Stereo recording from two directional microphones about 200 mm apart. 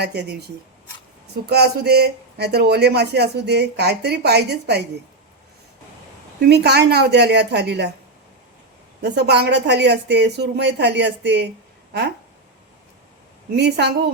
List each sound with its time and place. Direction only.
0.0 s speech: 55° right (ahead or behind)
1.5 s speech: 55° right (ahead or behind)
6.5 s speech: 55° right (ahead or behind)
9.0 s speech: 55° right (ahead or behind)
13.5 s speech: 55° right (ahead or behind)